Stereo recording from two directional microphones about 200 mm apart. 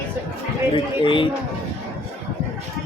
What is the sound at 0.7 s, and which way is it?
Speech, 25° left (ahead or behind).